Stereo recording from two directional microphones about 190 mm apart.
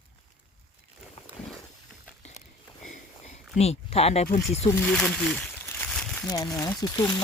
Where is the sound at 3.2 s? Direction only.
35° left (ahead or behind).